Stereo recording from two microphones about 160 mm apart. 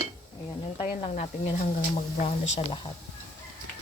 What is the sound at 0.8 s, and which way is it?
Speech, 40° left (ahead or behind).